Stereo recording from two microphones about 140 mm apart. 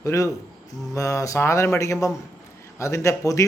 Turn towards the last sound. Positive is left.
turn(degrees=20)  # may be behind; listen again after turning